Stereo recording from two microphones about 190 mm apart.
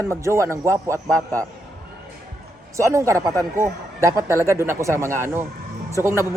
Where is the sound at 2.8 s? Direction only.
15° right (ahead or behind).